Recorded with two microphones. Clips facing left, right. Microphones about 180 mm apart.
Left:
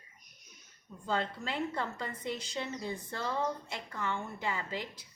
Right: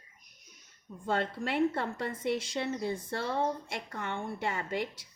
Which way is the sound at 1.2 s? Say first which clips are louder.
Right 7 dB; 60° right (ahead or behind).